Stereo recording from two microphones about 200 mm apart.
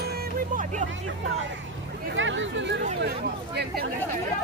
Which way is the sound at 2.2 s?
70° right (ahead or behind).